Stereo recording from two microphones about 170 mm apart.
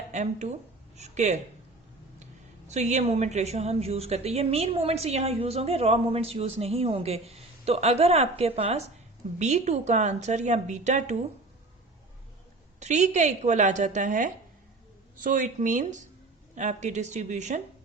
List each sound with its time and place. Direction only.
0.1 s a woman's voice: 45° right (ahead or behind)
2.6 s a woman's voice: 45° right (ahead or behind)
12.8 s a woman's voice: 45° right (ahead or behind)